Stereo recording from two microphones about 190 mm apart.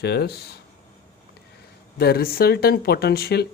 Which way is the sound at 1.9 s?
55° left (ahead or behind).